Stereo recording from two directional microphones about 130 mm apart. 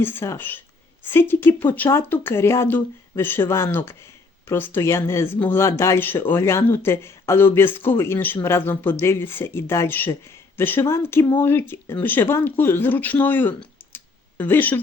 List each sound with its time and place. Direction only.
0.0 s speech: 15° left (ahead or behind)